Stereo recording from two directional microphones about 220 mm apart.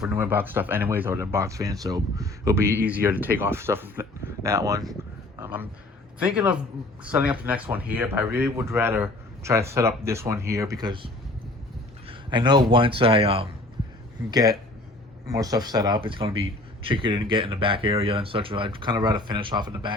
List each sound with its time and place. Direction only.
0.0 s speech: 10° right (ahead or behind)
5.4 s a sound: 10° right (ahead or behind)
6.2 s speech: 5° right (ahead or behind)